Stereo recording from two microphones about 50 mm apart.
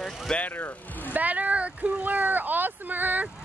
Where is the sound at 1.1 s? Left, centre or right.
Right.